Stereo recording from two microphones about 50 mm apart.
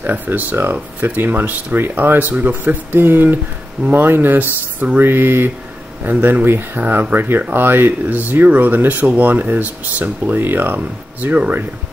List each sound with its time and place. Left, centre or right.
0.1 s speech: right
6.0 s speech: right
6.4 s speech: right